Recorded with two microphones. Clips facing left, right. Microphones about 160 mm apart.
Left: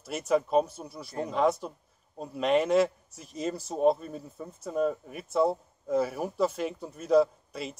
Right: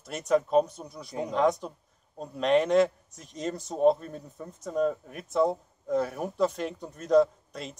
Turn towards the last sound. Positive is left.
turn(degrees=5)  # may be behind; listen again after turning